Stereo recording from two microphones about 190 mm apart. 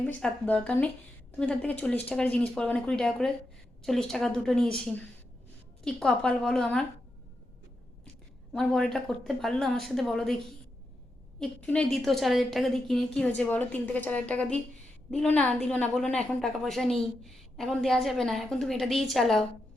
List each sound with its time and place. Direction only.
0.0 s a woman's voice: 10° left (ahead or behind)
8.5 s a woman's voice: 5° left (ahead or behind)
11.3 s a woman's voice: 5° left (ahead or behind)